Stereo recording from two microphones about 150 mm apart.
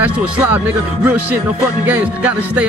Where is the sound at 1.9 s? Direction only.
10° right (ahead or behind).